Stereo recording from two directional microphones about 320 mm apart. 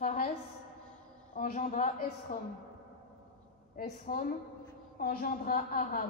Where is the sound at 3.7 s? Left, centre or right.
Left.